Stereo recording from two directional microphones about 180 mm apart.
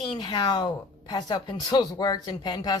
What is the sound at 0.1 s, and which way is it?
Speech, 25° left (ahead or behind).